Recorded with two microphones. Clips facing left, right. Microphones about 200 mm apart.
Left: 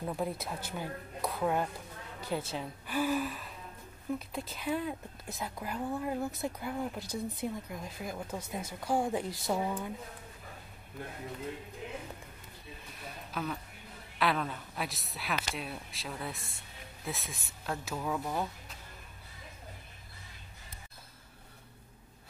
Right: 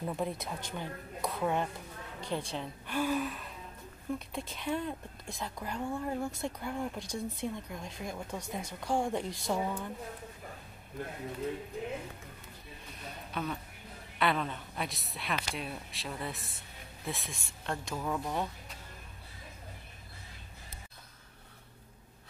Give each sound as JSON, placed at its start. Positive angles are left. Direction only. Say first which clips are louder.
{"t": 0.0, "sound": "a woman's voice", "louder": "even", "side_deg": 0}
{"t": 13.3, "sound": "a woman's voice", "louder": "even", "side_deg": 0}